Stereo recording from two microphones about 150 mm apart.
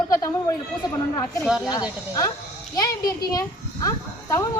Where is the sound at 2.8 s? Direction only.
25° left (ahead or behind).